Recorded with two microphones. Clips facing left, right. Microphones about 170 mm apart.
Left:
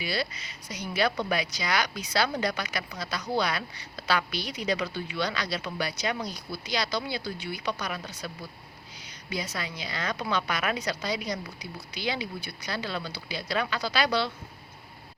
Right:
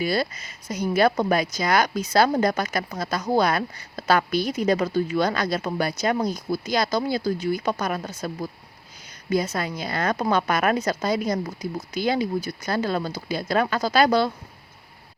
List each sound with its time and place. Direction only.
0.0 s speech: 50° right (ahead or behind)